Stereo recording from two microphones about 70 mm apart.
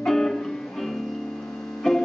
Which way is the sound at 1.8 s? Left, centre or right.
Centre.